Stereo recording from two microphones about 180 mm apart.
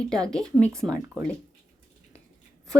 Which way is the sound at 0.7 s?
15° right (ahead or behind).